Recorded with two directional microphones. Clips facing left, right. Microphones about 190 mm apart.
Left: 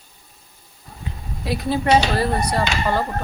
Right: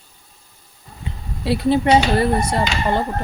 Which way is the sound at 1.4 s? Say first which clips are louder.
Right 5 dB; 25° right (ahead or behind).